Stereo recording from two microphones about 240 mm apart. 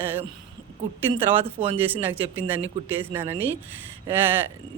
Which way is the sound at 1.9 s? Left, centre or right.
Centre.